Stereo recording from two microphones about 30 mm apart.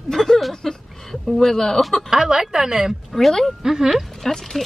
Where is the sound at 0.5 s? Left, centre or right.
Centre.